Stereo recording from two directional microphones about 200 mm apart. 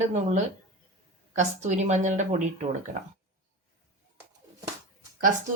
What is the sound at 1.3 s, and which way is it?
Speech, 35° right (ahead or behind).